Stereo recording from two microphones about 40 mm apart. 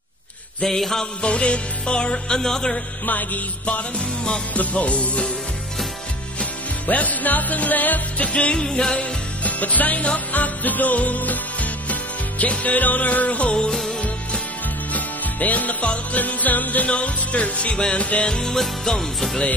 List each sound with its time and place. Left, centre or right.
0.7 s music: centre
1.2 s music: left
3.1 s music: left
6.9 s music: left
8.3 s music: left
13.5 s music: left
14.9 s music: left
18.2 s music: centre